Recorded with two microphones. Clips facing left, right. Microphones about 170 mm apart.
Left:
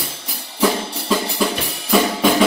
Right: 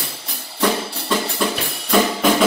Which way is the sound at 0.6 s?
Centre (ahead or behind).